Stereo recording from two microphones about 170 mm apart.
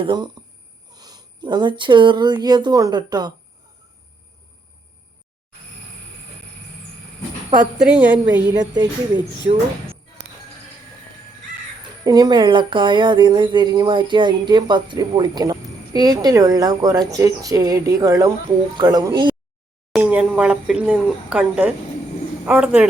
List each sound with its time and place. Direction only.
0.0 s speech: 25° right (ahead or behind)
7.8 s speech: 5° right (ahead or behind)
8.5 s speech: 25° right (ahead or behind)
12.0 s speech: 20° right (ahead or behind)
20.0 s speech: 5° right (ahead or behind)